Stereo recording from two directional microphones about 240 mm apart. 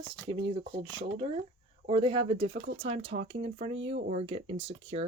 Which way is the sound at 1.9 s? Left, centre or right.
Right.